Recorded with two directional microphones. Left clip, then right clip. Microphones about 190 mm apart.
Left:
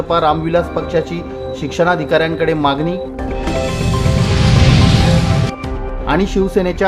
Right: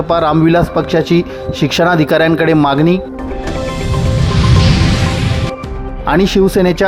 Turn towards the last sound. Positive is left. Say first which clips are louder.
# right 4 dB
turn(degrees=-40)  # may be behind; listen again after turning